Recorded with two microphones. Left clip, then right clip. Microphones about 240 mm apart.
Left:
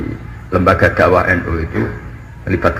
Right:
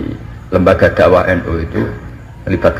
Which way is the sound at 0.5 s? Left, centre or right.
Right.